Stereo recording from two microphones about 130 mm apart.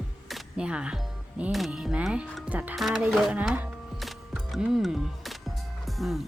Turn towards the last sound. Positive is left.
turn(degrees=0)  # may be behind; listen again after turning